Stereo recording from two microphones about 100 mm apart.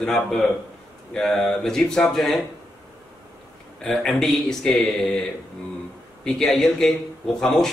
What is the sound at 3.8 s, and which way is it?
A man's voice, 5° left (ahead or behind).